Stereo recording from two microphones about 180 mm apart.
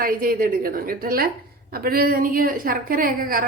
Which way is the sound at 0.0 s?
50° right (ahead or behind).